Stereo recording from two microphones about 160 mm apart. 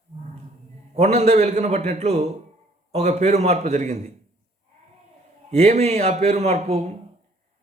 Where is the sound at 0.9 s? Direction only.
45° right (ahead or behind).